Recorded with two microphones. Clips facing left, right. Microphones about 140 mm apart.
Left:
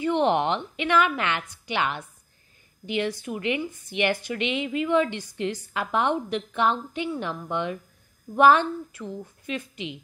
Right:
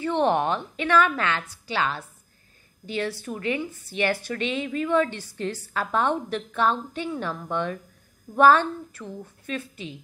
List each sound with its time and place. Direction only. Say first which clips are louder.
0.0 s a woman's voice: even; 15° left (ahead or behind)